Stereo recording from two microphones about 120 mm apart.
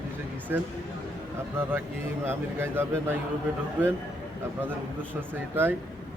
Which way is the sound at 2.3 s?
20° right (ahead or behind).